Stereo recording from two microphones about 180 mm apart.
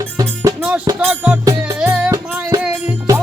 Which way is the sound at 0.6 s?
5° right (ahead or behind).